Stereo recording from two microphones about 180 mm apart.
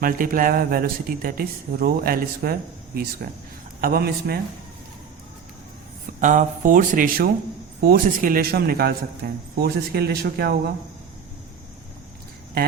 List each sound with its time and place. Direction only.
0.0 s speech: 50° right (ahead or behind)
6.1 s speech: 45° right (ahead or behind); by 10.6 s 60° right (ahead or behind)